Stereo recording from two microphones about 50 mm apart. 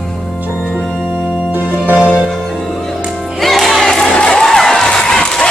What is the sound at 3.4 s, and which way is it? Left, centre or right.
Music, centre.